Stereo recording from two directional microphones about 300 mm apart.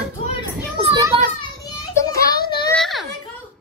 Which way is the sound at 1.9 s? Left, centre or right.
Centre.